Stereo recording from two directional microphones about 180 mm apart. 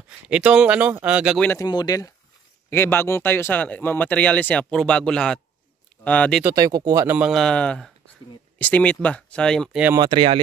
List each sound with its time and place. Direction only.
0.3 s speech: 5° right (ahead or behind)
1.6 s speech: 20° left (ahead or behind)
6.4 s speech: 20° right (ahead or behind)
7.2 s a man's voice: centre (ahead or behind)
9.9 s speech: 25° right (ahead or behind)